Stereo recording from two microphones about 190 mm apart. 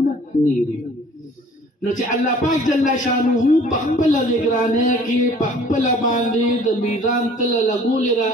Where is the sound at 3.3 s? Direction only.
40° left (ahead or behind).